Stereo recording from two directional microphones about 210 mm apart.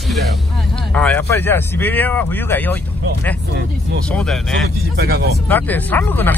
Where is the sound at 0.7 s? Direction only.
5° left (ahead or behind).